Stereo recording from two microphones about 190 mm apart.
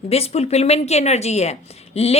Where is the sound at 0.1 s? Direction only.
35° left (ahead or behind).